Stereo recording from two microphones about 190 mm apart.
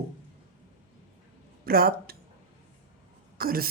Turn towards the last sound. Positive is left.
turn(degrees=-50)  # may be behind; listen again after turning